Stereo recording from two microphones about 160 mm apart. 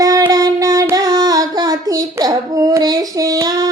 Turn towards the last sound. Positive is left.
turn(degrees=-25)  # may be behind; listen again after turning